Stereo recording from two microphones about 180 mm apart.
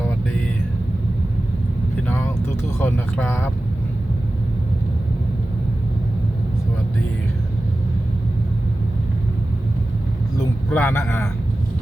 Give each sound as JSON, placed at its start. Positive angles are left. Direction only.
{"t": 2.6, "sound": "speech", "side_deg": 10}
{"t": 10.3, "sound": "speech", "side_deg": 10}